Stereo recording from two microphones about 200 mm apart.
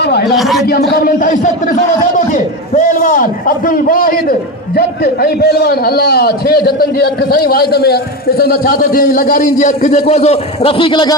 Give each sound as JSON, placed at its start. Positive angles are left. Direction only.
{"t": 0.0, "sound": "a man's voice", "side_deg": 55}
{"t": 0.3, "sound": "a man's voice", "side_deg": 0}
{"t": 0.7, "sound": "a man's voice", "side_deg": 45}